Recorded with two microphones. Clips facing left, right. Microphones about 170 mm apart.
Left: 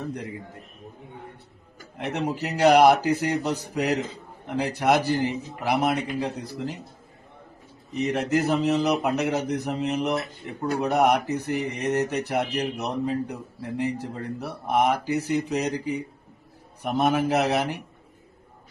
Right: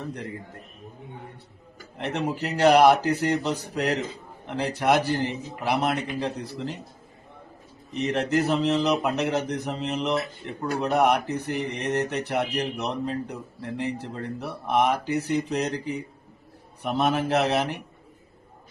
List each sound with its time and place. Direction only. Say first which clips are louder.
2.0 s speech: even; 10° left (ahead or behind)
8.0 s speech: even; 5° left (ahead or behind)